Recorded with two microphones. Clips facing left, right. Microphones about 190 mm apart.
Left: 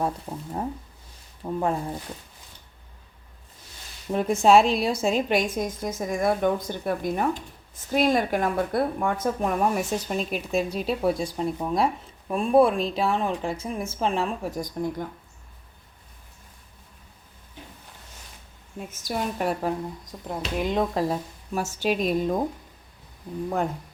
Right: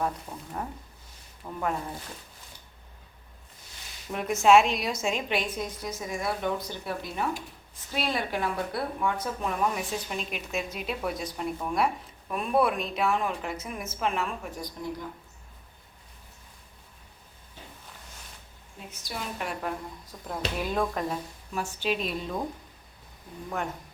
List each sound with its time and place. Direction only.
0.0 s speech: 25° left (ahead or behind)
4.1 s speech: 35° left (ahead or behind)
18.9 s speech: 45° left (ahead or behind)
20.2 s speech: 20° left (ahead or behind); by 22.4 s 45° left (ahead or behind)